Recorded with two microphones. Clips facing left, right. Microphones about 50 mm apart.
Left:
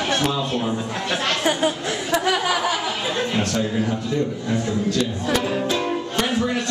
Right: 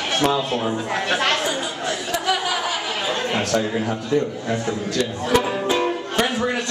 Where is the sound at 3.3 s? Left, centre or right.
Right.